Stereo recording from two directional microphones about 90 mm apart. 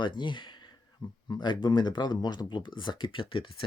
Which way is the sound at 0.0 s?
60° left (ahead or behind).